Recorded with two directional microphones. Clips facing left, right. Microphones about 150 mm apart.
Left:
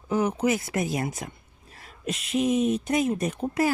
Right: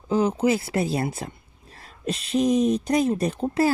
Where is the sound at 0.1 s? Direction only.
30° right (ahead or behind).